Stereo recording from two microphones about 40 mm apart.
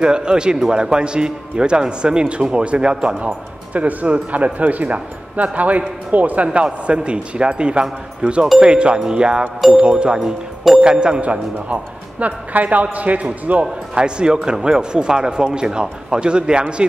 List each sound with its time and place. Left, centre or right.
0.0 s speech: right
3.7 s a man's voice: right
11.7 s a man's voice: right
13.9 s speech: right